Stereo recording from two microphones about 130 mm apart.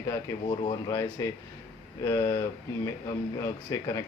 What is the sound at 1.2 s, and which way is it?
Speech, 25° left (ahead or behind).